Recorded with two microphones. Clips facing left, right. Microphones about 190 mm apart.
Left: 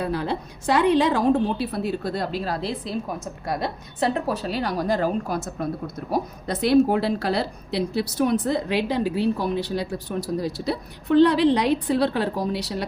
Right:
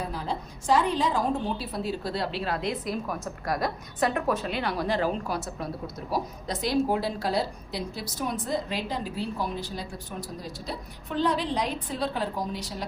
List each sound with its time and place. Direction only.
0.0 s a woman's voice: 70° left (ahead or behind); by 5.6 s 45° left (ahead or behind)
6.1 s a woman's voice: 60° left (ahead or behind)